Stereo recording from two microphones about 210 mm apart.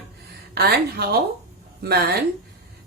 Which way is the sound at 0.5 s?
50° right (ahead or behind).